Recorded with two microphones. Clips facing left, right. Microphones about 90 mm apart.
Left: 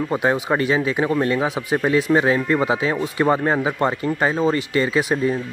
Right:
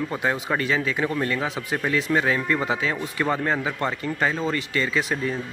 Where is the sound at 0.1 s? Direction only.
20° left (ahead or behind).